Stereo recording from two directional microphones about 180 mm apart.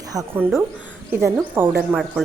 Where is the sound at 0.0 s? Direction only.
20° right (ahead or behind).